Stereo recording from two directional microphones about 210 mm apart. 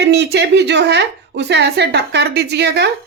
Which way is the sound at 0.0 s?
55° right (ahead or behind).